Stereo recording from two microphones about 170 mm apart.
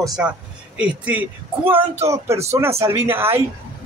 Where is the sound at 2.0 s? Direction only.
15° right (ahead or behind).